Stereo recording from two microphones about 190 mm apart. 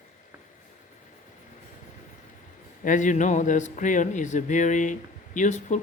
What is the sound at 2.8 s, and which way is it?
A woman's voice, 40° left (ahead or behind).